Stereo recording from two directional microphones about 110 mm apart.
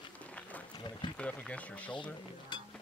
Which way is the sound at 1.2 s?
10° left (ahead or behind).